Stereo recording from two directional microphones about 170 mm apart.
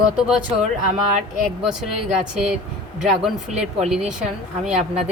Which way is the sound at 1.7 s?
5° right (ahead or behind).